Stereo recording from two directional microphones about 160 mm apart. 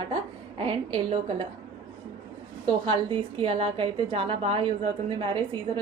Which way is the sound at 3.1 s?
30° right (ahead or behind).